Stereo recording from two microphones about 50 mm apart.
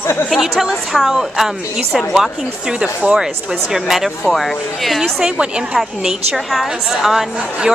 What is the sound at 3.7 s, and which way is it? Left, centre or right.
Speech, centre.